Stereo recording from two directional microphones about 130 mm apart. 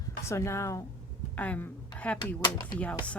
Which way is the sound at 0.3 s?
20° left (ahead or behind).